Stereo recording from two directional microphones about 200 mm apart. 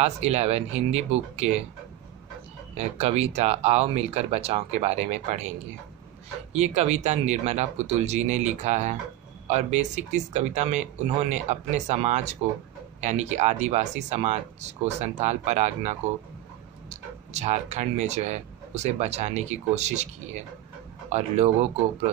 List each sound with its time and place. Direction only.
0.0 s speech: 30° right (ahead or behind)
3.0 s speech: 30° right (ahead or behind)
17.3 s speech: 35° right (ahead or behind)